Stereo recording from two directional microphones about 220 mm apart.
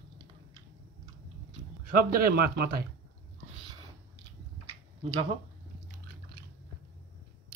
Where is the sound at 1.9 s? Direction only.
45° right (ahead or behind).